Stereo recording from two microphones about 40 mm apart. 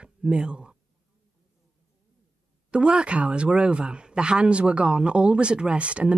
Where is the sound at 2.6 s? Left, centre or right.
Right.